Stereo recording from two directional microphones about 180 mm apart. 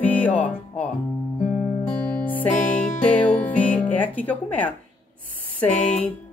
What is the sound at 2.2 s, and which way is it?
Music, 10° left (ahead or behind).